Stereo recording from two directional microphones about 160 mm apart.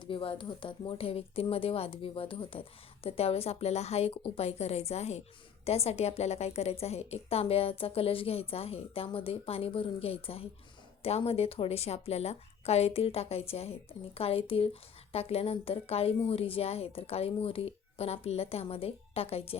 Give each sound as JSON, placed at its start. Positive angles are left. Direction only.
{"t": 0.0, "sound": "speech", "side_deg": 35}